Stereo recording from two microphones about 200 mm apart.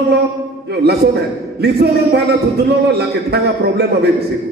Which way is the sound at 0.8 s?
55° right (ahead or behind).